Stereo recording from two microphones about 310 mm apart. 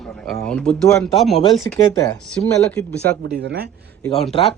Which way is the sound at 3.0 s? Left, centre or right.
Right.